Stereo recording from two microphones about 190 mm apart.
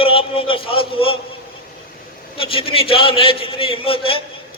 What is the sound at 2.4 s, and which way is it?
A man's voice, 30° left (ahead or behind).